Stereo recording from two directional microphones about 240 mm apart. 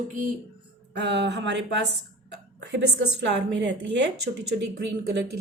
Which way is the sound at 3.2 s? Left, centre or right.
Right.